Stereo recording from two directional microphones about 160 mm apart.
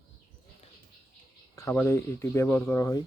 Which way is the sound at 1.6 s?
15° left (ahead or behind).